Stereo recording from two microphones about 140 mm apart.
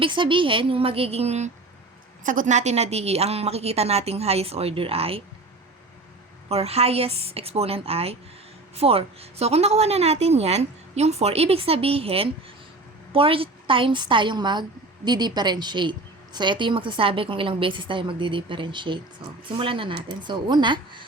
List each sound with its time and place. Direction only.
0.0 s a woman's voice: 35° right (ahead or behind)
2.2 s a woman's voice: 70° right (ahead or behind); by 5.2 s 45° right (ahead or behind)
6.5 s a woman's voice: 45° right (ahead or behind)